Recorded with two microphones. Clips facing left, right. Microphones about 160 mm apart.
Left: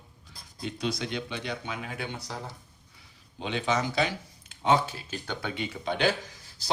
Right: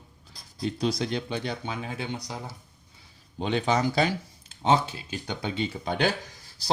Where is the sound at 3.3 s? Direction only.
40° right (ahead or behind).